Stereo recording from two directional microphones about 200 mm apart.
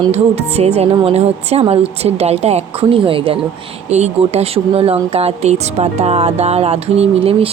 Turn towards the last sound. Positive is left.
turn(degrees=-30)  # may be behind; listen again after turning